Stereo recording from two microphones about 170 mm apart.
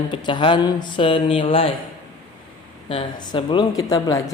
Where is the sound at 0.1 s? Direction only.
25° left (ahead or behind).